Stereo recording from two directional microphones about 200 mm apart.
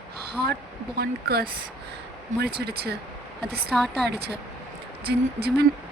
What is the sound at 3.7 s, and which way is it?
Speech, centre (ahead or behind).